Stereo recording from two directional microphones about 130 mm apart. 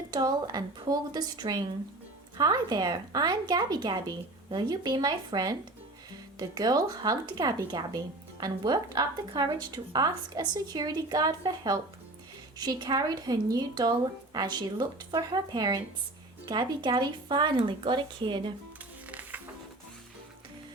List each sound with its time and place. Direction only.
0.1 s speech: 30° right (ahead or behind)
19.0 s music: 10° right (ahead or behind)